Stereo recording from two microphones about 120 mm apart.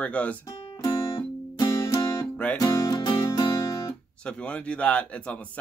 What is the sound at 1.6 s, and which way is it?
Music, 30° left (ahead or behind).